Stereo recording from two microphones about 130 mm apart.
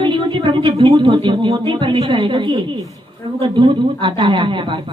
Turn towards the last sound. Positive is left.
turn(degrees=-40)  # may be behind; listen again after turning